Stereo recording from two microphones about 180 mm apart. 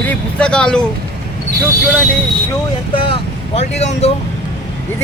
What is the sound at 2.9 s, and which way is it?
Speech, 30° left (ahead or behind).